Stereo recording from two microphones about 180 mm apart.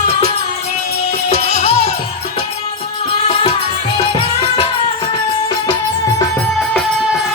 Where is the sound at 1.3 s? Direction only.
60° right (ahead or behind).